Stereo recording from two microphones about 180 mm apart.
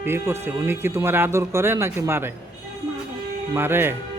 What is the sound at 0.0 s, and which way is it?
Speech, 15° right (ahead or behind).